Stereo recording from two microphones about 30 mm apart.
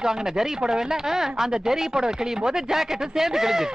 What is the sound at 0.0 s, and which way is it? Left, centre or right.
Speech, centre.